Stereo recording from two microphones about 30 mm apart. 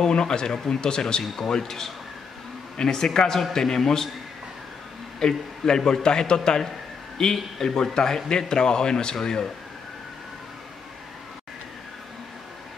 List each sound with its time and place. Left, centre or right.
0.0 s speech: left
1.2 s a man's voice: centre
5.2 s a man's voice: left